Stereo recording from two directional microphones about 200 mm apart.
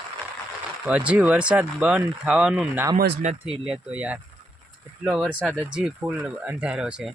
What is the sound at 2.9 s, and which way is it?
Speech, 55° right (ahead or behind).